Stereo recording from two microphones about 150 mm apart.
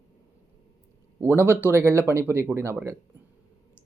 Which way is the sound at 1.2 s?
15° right (ahead or behind).